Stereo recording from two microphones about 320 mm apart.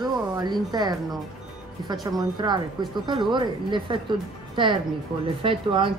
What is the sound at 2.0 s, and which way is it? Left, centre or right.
A woman's voice, centre.